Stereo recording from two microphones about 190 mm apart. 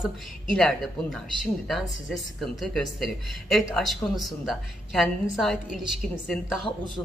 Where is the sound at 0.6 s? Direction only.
Centre (ahead or behind).